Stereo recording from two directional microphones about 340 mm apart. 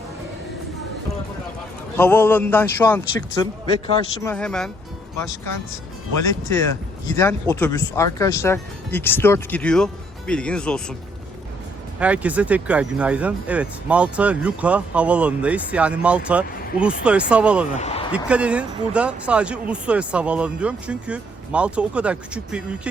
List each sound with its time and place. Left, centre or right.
2.0 s a man's voice: centre
6.2 s a man's voice: centre
11.9 s speech: centre
17.7 s a sound: centre
18.3 s speech: centre